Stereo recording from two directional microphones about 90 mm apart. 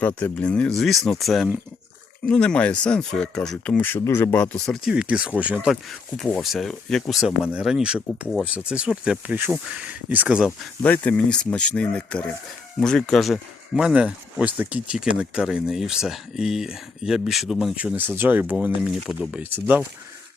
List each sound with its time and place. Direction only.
0.2 s speech: 15° left (ahead or behind)
0.7 s speech: centre (ahead or behind)
3.8 s speech: 30° left (ahead or behind)
4.6 s speech: 5° left (ahead or behind)
4.9 s speech: 5° right (ahead or behind)
5.6 s speech: 5° left (ahead or behind)
10.8 s speech: 15° left (ahead or behind); by 17.7 s centre (ahead or behind)
17.9 s speech: 20° right (ahead or behind)
18.8 s speech: 5° right (ahead or behind)
19.4 s speech: 20° right (ahead or behind)